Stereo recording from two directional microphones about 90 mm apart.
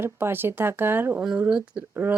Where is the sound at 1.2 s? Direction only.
15° right (ahead or behind).